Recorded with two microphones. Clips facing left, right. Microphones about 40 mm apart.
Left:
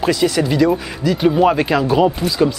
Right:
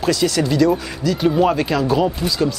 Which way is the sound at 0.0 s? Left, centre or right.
Centre.